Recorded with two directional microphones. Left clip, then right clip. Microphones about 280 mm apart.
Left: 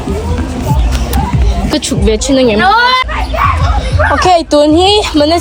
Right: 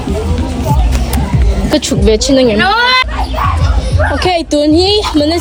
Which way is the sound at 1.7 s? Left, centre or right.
Centre.